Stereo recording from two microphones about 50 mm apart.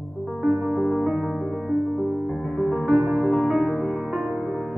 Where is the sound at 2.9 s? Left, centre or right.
Right.